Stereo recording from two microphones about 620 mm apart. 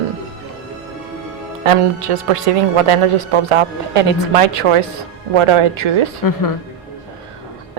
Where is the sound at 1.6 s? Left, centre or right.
Right.